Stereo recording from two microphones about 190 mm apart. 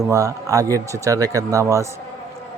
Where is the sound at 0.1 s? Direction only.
15° right (ahead or behind).